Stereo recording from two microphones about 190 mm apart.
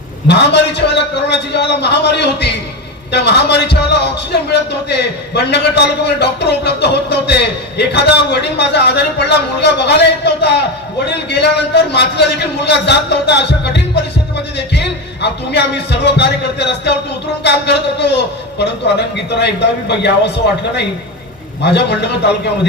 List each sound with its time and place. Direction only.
0.3 s a man's voice: 60° left (ahead or behind)
19.1 s a man's voice: 65° left (ahead or behind)
21.6 s a man's voice: 60° left (ahead or behind)